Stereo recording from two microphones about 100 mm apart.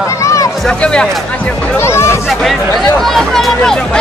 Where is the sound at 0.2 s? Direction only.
30° left (ahead or behind).